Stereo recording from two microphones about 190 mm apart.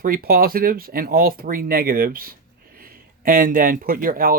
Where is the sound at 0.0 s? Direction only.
50° right (ahead or behind).